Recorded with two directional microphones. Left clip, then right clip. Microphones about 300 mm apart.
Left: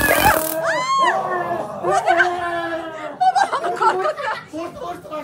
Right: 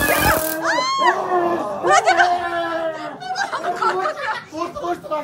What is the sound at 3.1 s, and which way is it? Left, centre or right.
Snicker, centre.